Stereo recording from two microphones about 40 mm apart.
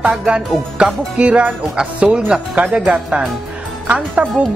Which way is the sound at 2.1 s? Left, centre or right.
Right.